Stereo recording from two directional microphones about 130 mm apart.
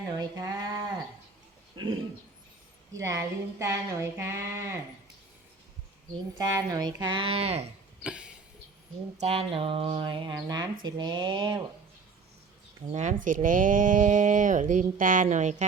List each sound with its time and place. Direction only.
0.2 s a sound: 30° right (ahead or behind)
1.7 s bird: 35° right (ahead or behind)
2.9 s speech: 25° right (ahead or behind)
6.4 s speech: 30° right (ahead or behind); by 7.7 s 50° right (ahead or behind)
8.0 s a sound: 10° right (ahead or behind)
9.2 s speech: 45° right (ahead or behind)
12.9 s speech: 65° right (ahead or behind)